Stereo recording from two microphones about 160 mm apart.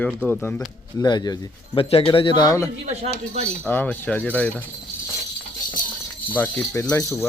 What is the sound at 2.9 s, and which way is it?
Speech, 45° right (ahead or behind).